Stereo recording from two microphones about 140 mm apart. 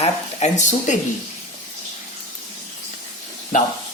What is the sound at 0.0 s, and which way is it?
Speech, 50° left (ahead or behind).